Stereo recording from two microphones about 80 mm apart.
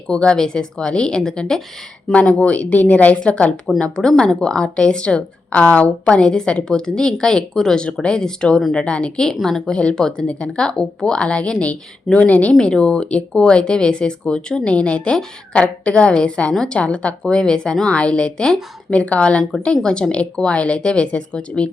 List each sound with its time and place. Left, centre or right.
0.1 s speech: centre